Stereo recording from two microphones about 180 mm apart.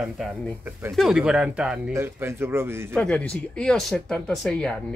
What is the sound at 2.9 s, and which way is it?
Speech, 5° left (ahead or behind).